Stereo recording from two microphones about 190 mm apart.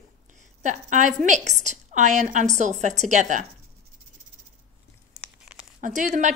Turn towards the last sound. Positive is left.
turn(degrees=-40)  # may be behind; listen again after turning